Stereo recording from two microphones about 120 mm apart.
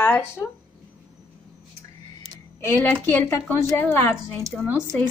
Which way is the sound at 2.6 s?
15° left (ahead or behind).